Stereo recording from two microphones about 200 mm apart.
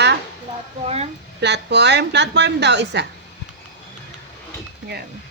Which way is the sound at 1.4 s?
60° right (ahead or behind).